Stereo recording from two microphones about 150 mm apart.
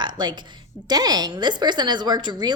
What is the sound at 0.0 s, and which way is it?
A woman's voice, 30° right (ahead or behind).